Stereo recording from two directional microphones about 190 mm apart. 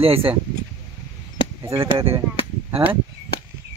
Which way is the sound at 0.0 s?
30° right (ahead or behind).